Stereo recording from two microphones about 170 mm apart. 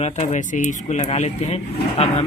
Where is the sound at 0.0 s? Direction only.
45° left (ahead or behind).